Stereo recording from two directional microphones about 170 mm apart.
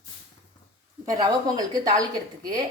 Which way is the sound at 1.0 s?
20° right (ahead or behind).